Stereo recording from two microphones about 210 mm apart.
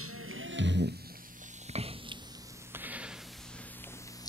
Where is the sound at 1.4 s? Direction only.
35° right (ahead or behind).